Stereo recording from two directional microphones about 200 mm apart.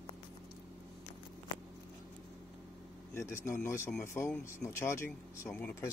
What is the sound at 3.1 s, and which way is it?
Speech, 15° left (ahead or behind).